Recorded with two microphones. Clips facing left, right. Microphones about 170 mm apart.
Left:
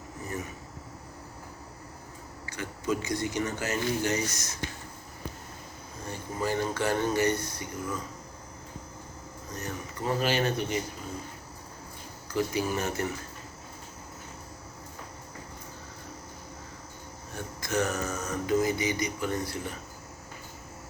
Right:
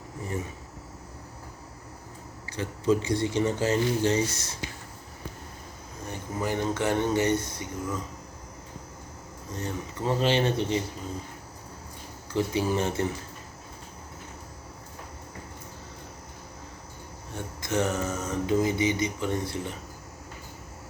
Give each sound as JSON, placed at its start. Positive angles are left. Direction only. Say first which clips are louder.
{"t": 2.5, "sound": "speech", "louder": "right 6 dB", "side_deg": -30}
{"t": 6.1, "sound": "speech", "louder": "right 1 dB", "side_deg": -20}
{"t": 9.5, "sound": "speech", "louder": "right 4 dB", "side_deg": -25}
{"t": 12.3, "sound": "speech", "louder": "right 2 dB", "side_deg": -25}
{"t": 17.3, "sound": "mantra", "louder": "right 2 dB", "side_deg": -25}